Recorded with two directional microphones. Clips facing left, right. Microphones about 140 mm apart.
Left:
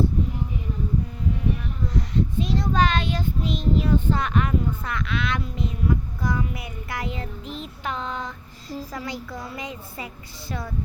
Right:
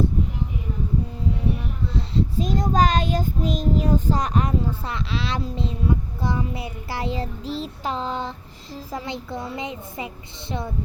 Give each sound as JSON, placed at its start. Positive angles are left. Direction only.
{"t": 1.9, "sound": "child singing", "side_deg": -30}
{"t": 8.9, "sound": "a woman's voice", "side_deg": -25}